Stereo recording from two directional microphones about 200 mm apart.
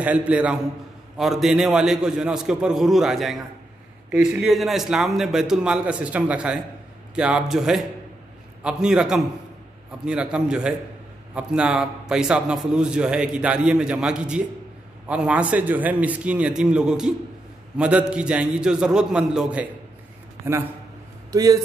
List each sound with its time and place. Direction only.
0.0 s a man's voice: 5° right (ahead or behind)
21.3 s speech: 20° right (ahead or behind)